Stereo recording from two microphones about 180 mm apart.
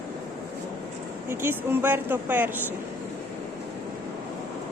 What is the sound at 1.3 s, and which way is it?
Speech, 10° right (ahead or behind).